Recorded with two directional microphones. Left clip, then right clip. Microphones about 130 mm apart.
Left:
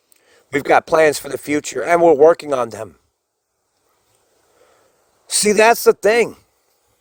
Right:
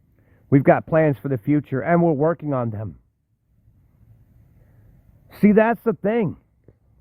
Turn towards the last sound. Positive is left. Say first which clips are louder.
# left 9 dB
turn(degrees=35)  # may be behind; listen again after turning